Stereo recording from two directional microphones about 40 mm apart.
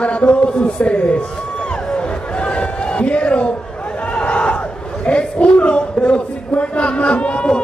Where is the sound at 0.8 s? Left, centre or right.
Left.